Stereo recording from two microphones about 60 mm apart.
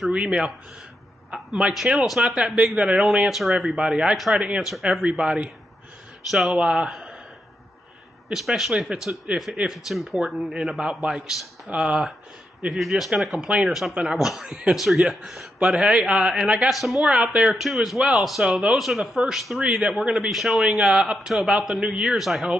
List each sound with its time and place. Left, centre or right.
0.1 s a man's voice: centre
3.3 s speech: centre
3.7 s speech: centre
8.3 s speech: centre
10.5 s speech: centre
11.7 s speech: centre
12.6 s speech: centre
13.4 s speech: right
13.7 s speech: centre
16.6 s speech: centre
17.1 s speech: centre
17.6 s speech: centre